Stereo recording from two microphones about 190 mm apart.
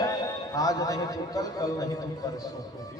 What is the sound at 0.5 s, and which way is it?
Music, 20° left (ahead or behind).